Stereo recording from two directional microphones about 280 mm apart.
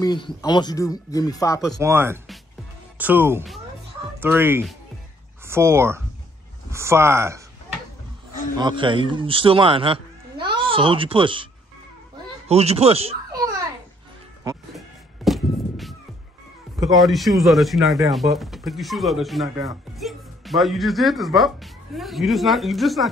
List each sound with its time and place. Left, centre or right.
0.0 s speech: centre
1.8 s speech: centre
8.5 s speech: centre
12.4 s speech: right
15.2 s a sound: centre
16.9 s speech: centre